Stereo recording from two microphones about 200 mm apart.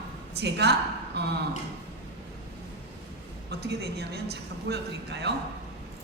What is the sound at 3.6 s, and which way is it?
A woman's voice, 55° right (ahead or behind).